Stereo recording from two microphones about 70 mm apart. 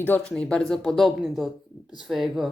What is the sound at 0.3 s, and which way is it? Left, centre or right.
A woman's voice, centre.